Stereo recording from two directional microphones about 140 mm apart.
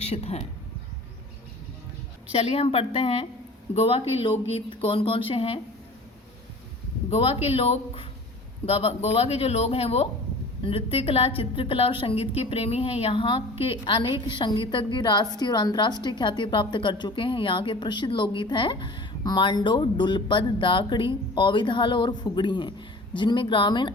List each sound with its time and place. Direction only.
0.0 s speech: 50° left (ahead or behind)
2.3 s a woman's voice: 50° left (ahead or behind)
7.1 s a woman's voice: 45° left (ahead or behind)